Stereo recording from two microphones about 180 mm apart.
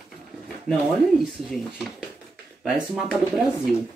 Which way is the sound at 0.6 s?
Centre (ahead or behind).